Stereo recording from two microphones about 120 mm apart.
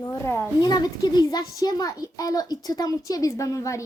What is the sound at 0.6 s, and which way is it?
A child's voice, 35° left (ahead or behind).